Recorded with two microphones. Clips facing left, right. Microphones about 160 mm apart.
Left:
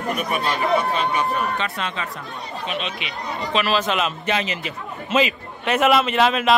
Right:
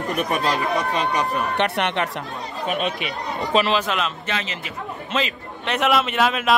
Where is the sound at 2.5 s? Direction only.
50° right (ahead or behind).